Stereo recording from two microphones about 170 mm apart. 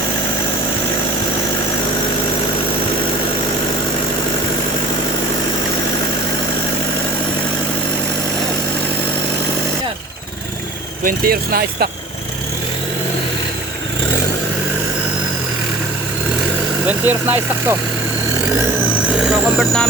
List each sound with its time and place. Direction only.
11.0 s speech: 60° right (ahead or behind)
16.8 s vehicle: 10° right (ahead or behind)
19.2 s vehicle: centre (ahead or behind)